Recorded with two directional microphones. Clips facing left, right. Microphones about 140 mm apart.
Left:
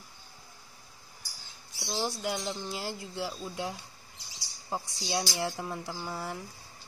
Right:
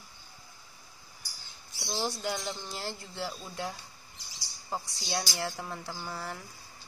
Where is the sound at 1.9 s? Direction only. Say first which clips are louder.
Left 1 dB; 5° left (ahead or behind).